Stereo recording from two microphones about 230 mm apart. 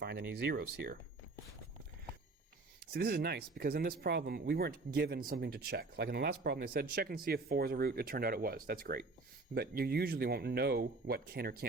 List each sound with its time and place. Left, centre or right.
0.0 s speech: right
2.9 s speech: right